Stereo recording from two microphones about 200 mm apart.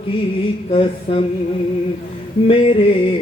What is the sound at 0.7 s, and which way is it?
Music, 25° left (ahead or behind).